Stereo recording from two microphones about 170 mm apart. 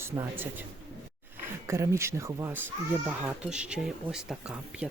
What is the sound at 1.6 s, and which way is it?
Speech, 15° right (ahead or behind).